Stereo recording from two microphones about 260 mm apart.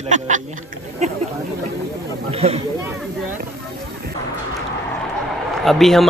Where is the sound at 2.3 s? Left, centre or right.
Right.